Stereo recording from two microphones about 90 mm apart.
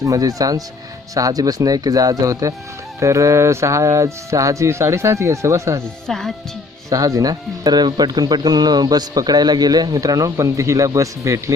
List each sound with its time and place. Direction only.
0.0 s speech: 40° right (ahead or behind)
6.1 s music: 5° left (ahead or behind)
6.9 s speech: 40° right (ahead or behind)